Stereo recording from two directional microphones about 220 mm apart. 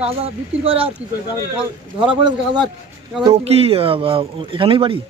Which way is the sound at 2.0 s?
20° right (ahead or behind).